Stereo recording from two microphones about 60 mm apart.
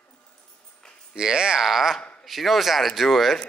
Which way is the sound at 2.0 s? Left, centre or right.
Centre.